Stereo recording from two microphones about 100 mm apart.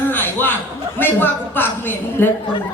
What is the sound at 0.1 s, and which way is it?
Chuckle, 20° left (ahead or behind).